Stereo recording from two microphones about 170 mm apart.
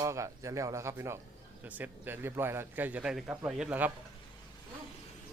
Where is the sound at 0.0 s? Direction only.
20° right (ahead or behind).